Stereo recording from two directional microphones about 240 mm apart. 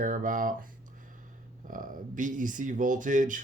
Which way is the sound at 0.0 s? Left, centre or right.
Right.